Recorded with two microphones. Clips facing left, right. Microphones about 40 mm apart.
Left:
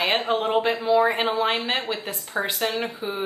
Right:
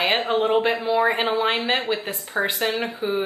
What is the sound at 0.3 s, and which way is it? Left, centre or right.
A woman's voice, centre.